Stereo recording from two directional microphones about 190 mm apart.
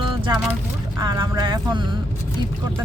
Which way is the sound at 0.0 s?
25° right (ahead or behind).